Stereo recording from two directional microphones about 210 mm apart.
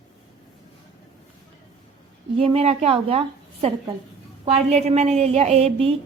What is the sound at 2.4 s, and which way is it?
A woman's voice, 30° right (ahead or behind).